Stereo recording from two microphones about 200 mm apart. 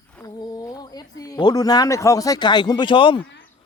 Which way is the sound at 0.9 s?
20° left (ahead or behind).